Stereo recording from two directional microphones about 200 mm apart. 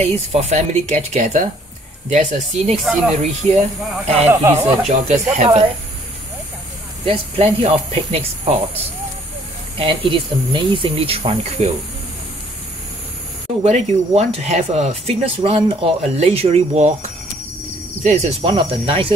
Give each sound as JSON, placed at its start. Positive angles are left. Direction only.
{"t": 0.0, "sound": "speech", "side_deg": -35}
{"t": 4.3, "sound": "speech", "side_deg": -15}
{"t": 4.8, "sound": "speech", "side_deg": -35}
{"t": 7.1, "sound": "speech", "side_deg": -30}
{"t": 13.7, "sound": "speech", "side_deg": -35}